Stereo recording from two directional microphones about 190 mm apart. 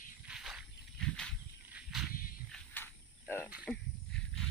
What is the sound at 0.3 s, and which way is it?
Snake, centre (ahead or behind).